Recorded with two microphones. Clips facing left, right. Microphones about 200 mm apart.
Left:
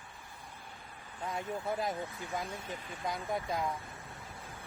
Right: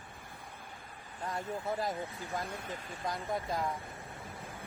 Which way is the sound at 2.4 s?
55° right (ahead or behind).